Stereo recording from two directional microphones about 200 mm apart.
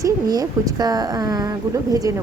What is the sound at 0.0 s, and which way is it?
A woman's voice, 20° right (ahead or behind).